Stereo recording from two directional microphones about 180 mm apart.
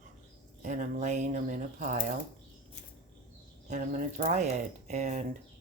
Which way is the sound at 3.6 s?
45° right (ahead or behind).